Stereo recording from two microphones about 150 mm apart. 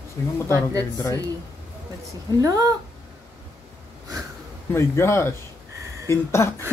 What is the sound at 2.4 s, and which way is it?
Speech, 20° right (ahead or behind).